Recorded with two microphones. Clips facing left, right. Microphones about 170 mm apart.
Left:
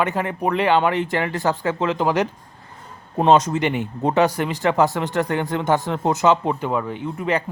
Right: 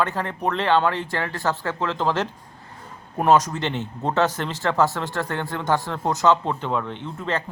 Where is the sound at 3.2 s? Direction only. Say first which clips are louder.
Left 3 dB; 25° left (ahead or behind).